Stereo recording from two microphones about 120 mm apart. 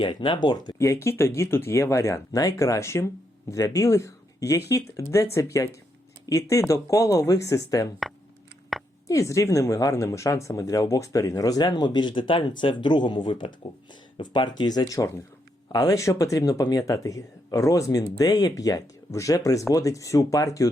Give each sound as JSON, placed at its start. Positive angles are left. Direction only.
{"t": 0.0, "sound": "speech", "side_deg": 45}
{"t": 8.7, "sound": "a sound", "side_deg": 0}
{"t": 9.0, "sound": "speech", "side_deg": 25}